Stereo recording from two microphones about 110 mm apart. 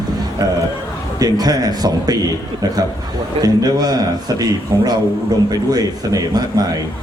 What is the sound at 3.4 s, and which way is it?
A man's voice, 35° right (ahead or behind).